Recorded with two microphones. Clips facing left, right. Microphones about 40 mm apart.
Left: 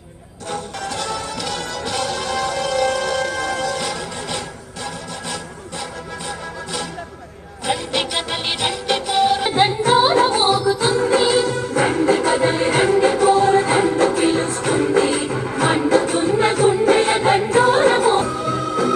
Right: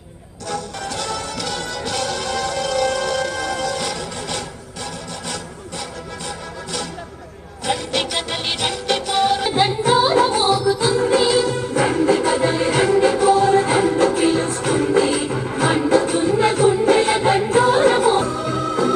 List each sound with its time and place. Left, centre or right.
0.8 s music: centre
7.6 s music: centre
9.5 s music: left
18.3 s music: centre